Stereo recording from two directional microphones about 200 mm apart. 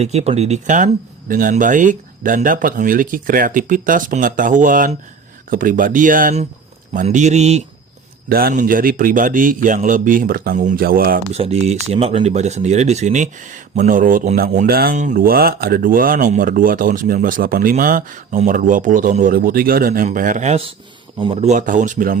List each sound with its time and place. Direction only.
0.0 s speech: 35° right (ahead or behind)
8.3 s speech: 50° right (ahead or behind)
11.3 s speech: 30° right (ahead or behind)